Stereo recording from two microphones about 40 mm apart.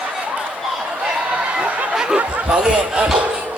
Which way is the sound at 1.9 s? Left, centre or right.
Centre.